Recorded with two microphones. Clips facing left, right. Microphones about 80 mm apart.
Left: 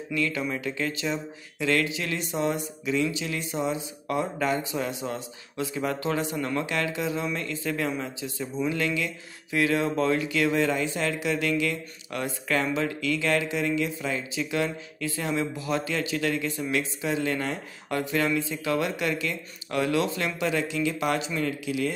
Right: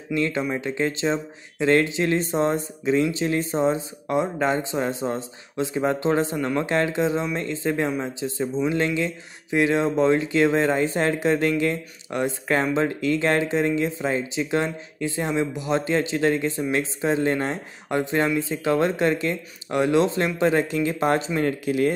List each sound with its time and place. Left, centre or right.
0.1 s speech: right
4.1 s speech: right